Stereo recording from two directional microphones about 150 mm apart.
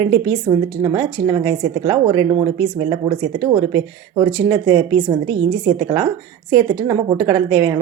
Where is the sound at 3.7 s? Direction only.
20° right (ahead or behind).